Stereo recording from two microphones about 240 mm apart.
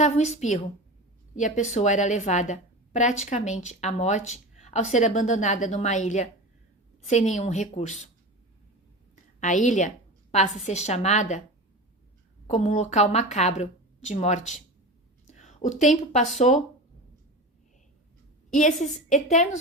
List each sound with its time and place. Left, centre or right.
0.0 s a woman's voice: left
9.4 s a woman's voice: left
12.5 s a woman's voice: left
15.3 s a sound: left
15.8 s a woman's voice: left
18.5 s a woman's voice: left